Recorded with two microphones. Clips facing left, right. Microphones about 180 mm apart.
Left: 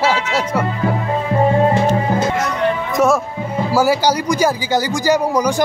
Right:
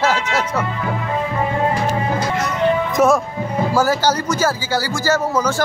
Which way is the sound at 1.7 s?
25° left (ahead or behind).